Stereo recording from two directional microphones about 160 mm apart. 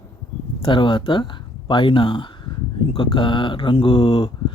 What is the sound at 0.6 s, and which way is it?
Speech, 30° left (ahead or behind).